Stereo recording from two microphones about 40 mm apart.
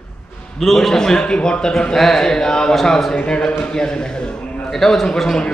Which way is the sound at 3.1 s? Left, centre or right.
Left.